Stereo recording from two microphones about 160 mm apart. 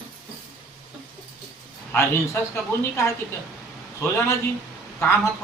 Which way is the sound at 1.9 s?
15° left (ahead or behind).